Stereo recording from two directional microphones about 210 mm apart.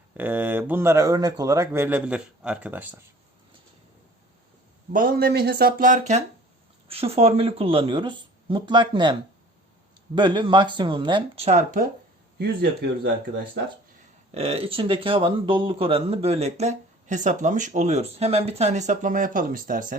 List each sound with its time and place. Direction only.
0.2 s speech: 5° right (ahead or behind)
4.9 s speech: 40° right (ahead or behind); by 9.1 s 20° right (ahead or behind)
10.2 s speech: 20° right (ahead or behind)
12.4 s speech: 50° right (ahead or behind)
14.3 s speech: 25° right (ahead or behind)